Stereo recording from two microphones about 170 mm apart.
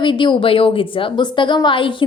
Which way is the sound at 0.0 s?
30° left (ahead or behind).